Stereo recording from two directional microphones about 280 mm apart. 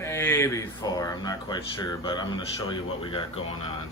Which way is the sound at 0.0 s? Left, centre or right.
Centre.